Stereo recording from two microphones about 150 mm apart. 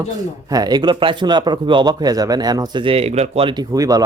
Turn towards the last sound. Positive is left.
turn(degrees=-25)  # may be behind; listen again after turning